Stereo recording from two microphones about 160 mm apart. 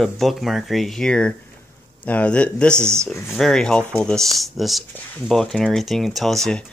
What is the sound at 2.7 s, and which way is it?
Speech, 15° right (ahead or behind).